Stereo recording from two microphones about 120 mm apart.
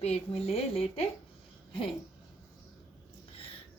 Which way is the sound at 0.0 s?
60° left (ahead or behind).